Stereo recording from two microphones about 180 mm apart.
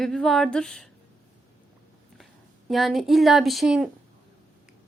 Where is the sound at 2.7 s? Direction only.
Centre (ahead or behind).